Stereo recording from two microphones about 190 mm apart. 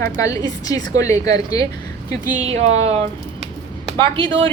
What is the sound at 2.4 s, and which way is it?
Speech, 35° right (ahead or behind).